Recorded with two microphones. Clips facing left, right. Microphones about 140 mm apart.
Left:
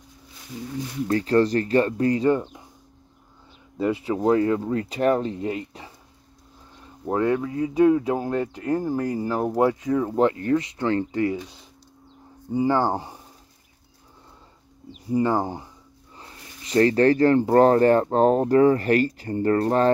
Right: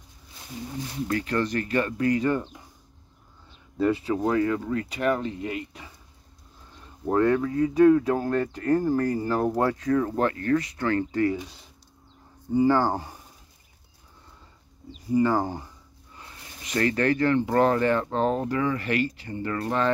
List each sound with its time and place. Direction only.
1.0 s speech: 35° left (ahead or behind)
3.7 s speech: 15° left (ahead or behind); by 5.9 s 30° left (ahead or behind)
7.1 s speech: 15° left (ahead or behind)
12.5 s speech: 20° left (ahead or behind)
15.0 s speech: 25° left (ahead or behind)
16.2 s speech: 35° left (ahead or behind)